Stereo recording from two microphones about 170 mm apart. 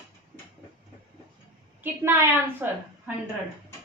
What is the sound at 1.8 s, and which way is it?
Speech, 15° right (ahead or behind).